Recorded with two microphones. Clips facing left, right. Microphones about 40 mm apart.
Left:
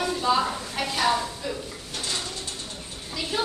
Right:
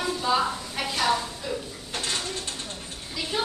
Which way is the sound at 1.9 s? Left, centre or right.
Right.